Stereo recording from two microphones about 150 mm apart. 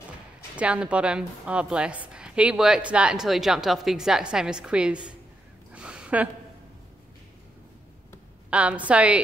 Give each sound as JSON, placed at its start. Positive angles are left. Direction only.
{"t": 0.6, "sound": "a woman's voice", "side_deg": -10}
{"t": 5.7, "sound": "a sound", "side_deg": -5}
{"t": 8.5, "sound": "a woman's voice", "side_deg": -10}